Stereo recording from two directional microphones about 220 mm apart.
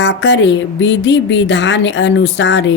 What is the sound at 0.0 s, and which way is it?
Speech, 55° left (ahead or behind).